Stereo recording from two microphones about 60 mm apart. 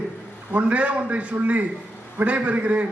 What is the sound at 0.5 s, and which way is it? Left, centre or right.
A man's voice, right.